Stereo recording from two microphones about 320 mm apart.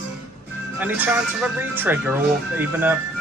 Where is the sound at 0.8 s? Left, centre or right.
Centre.